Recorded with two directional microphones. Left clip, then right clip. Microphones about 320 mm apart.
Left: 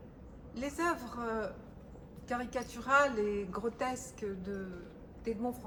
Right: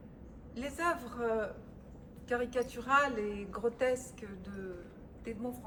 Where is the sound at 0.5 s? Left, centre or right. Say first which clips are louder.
Even; centre.